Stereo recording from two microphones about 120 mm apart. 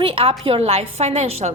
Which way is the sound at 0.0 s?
50° right (ahead or behind).